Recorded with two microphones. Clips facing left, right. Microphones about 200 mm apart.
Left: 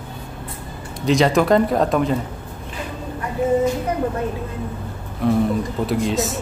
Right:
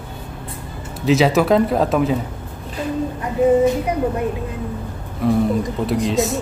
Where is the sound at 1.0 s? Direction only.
5° right (ahead or behind).